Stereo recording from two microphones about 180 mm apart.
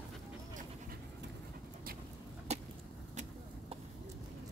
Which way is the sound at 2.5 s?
35° right (ahead or behind).